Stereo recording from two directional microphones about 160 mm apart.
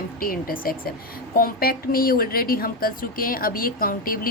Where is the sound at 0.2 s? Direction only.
65° left (ahead or behind).